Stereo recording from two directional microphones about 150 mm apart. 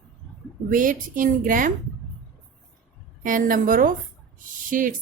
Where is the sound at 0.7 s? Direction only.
65° right (ahead or behind).